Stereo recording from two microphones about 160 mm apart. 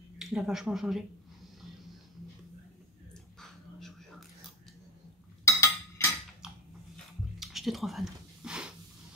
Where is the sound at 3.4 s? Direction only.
Centre (ahead or behind).